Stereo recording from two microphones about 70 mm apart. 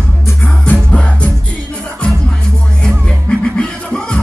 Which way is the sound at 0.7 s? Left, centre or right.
Centre.